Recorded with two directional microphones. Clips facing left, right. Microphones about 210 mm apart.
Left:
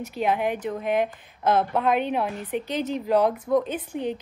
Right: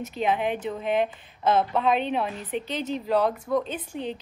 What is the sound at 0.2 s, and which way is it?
A woman's voice, 10° left (ahead or behind).